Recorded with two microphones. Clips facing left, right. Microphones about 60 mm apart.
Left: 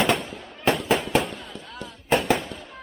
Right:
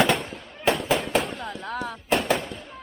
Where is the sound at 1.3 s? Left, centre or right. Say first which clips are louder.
Right 6 dB; right.